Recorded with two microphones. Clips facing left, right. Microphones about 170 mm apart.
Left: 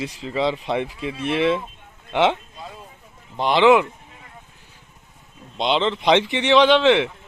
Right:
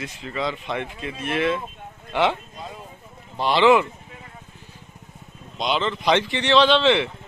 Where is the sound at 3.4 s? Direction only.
20° left (ahead or behind).